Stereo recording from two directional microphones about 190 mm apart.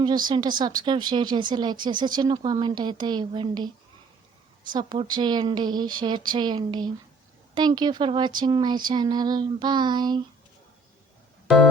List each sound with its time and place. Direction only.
0.3 s speech: 25° right (ahead or behind)
4.7 s speech: 25° right (ahead or behind)